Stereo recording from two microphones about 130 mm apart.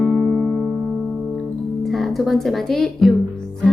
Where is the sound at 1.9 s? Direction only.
Centre (ahead or behind).